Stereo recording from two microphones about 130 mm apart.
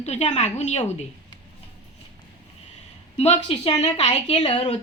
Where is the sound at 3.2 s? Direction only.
55° left (ahead or behind).